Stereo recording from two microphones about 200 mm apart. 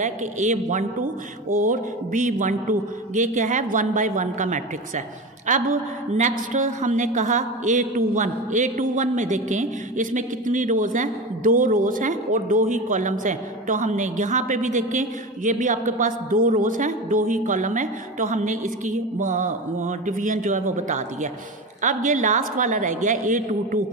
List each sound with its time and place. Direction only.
0.0 s a woman's voice: 40° right (ahead or behind)